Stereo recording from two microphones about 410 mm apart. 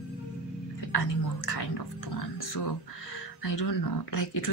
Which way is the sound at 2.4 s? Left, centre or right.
Left.